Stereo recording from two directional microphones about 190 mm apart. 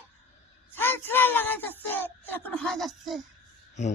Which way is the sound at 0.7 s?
10° left (ahead or behind).